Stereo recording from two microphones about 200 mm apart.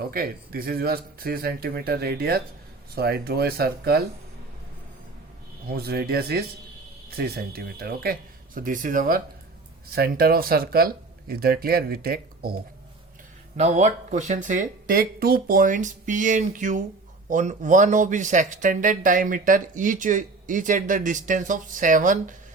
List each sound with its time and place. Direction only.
0.0 s speech: 50° right (ahead or behind)
5.6 s speech: 50° right (ahead or behind)
13.6 s speech: 35° right (ahead or behind)